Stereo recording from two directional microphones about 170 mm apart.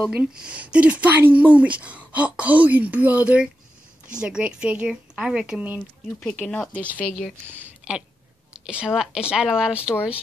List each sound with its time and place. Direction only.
0.0 s a woman's voice: 5° right (ahead or behind)
6.1 s speech: 10° left (ahead or behind)
7.4 s speech: 10° right (ahead or behind)